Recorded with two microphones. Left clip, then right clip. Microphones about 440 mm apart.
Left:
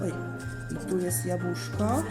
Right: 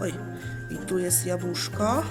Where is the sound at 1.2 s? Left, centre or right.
Right.